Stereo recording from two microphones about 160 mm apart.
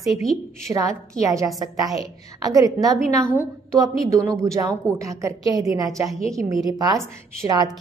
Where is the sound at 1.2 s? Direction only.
20° right (ahead or behind).